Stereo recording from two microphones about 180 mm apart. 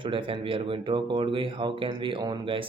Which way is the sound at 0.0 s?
30° right (ahead or behind).